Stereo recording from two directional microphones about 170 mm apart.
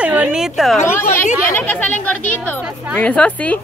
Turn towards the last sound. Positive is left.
turn(degrees=10)  # may be behind; listen again after turning